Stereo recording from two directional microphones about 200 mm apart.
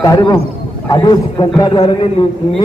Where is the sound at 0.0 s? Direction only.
15° left (ahead or behind).